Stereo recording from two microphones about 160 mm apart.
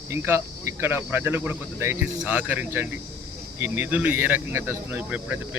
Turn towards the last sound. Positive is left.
turn(degrees=-10)  # may be behind; listen again after turning